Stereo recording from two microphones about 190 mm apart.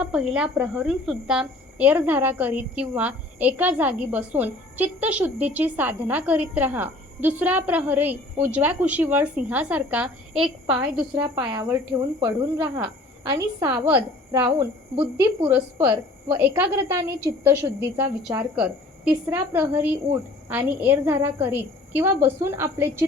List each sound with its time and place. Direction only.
0.0 s a woman's voice: 5° right (ahead or behind)
11.2 s speech: 20° right (ahead or behind)
12.5 s a woman's voice: 5° right (ahead or behind)